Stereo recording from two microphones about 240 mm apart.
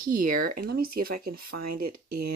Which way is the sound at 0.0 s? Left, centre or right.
Right.